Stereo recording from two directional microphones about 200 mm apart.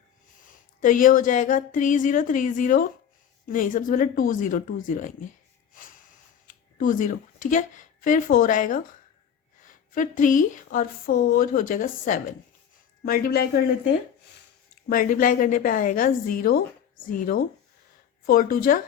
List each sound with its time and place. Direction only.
0.4 s a woman's voice: 40° left (ahead or behind)
6.7 s a woman's voice: 40° left (ahead or behind)
14.8 s a woman's voice: 45° left (ahead or behind)